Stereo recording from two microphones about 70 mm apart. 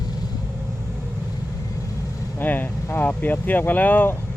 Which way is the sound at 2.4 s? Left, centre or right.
Left.